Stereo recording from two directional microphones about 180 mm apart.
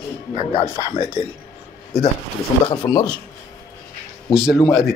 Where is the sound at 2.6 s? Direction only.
20° left (ahead or behind).